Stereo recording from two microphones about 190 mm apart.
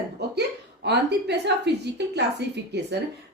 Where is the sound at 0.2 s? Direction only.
60° right (ahead or behind).